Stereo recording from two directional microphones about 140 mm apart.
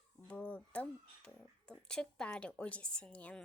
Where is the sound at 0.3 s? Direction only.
10° left (ahead or behind).